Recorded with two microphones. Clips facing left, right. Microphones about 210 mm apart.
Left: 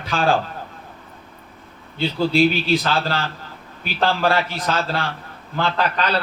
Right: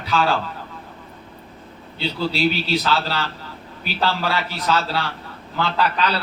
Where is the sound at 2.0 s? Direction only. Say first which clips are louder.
Left 5 dB; 50° left (ahead or behind).